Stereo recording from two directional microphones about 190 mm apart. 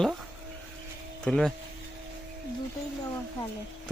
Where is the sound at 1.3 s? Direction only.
Centre (ahead or behind).